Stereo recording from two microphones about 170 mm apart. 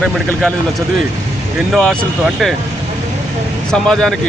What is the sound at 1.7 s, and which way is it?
Speech, centre (ahead or behind).